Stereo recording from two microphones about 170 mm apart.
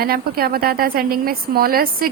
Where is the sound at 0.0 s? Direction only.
60° right (ahead or behind).